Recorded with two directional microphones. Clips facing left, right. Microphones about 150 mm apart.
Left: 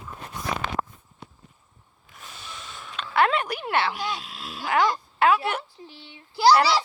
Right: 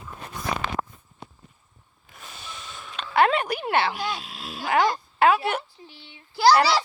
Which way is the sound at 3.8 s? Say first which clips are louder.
Even; 25° left (ahead or behind).